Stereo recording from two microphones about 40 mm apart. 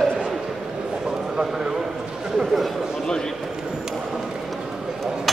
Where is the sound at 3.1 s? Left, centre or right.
Centre.